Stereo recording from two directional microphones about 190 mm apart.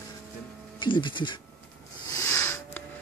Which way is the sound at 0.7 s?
25° left (ahead or behind).